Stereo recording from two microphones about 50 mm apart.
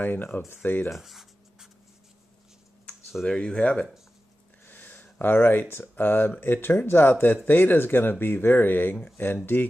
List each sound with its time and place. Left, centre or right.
0.0 s speech: left
0.9 s writing: centre
3.3 s speech: left
4.6 s speech: left